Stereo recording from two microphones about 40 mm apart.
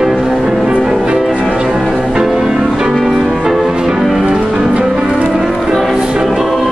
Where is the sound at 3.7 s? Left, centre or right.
Centre.